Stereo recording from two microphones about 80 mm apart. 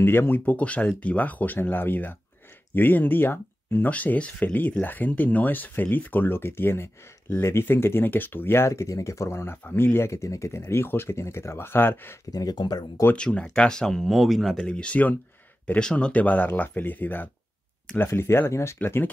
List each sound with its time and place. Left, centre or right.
0.0 s speech: left
12.3 s speech: left
13.1 s speech: centre
14.6 s speech: centre; by 19.0 s left